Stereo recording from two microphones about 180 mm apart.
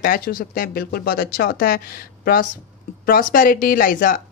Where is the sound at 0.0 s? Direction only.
55° left (ahead or behind).